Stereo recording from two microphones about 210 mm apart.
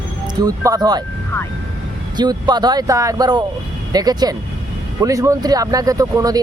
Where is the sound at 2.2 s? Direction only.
20° right (ahead or behind).